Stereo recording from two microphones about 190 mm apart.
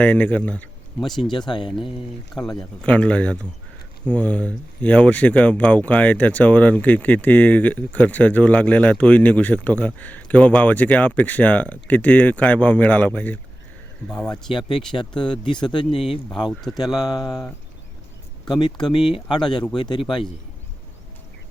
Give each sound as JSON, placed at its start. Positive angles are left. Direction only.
{"t": 0.0, "sound": "speech", "side_deg": 5}
{"t": 1.3, "sound": "speech", "side_deg": 25}
{"t": 2.3, "sound": "speech", "side_deg": 0}
{"t": 14.9, "sound": "speech", "side_deg": 25}
{"t": 16.3, "sound": "speech", "side_deg": 0}
{"t": 17.1, "sound": "speech", "side_deg": 20}
{"t": 18.6, "sound": "speech", "side_deg": 25}